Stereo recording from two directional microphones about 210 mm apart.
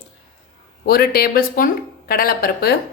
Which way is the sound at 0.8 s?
45° left (ahead or behind).